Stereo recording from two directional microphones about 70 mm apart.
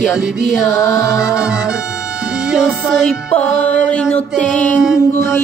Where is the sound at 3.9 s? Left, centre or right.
Centre.